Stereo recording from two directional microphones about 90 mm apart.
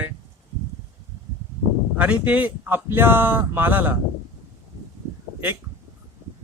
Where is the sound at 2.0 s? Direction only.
15° right (ahead or behind).